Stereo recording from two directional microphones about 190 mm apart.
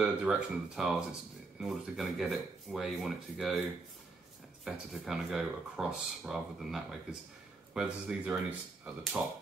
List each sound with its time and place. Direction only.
0.0 s speech: 5° right (ahead or behind)
4.6 s speech: centre (ahead or behind)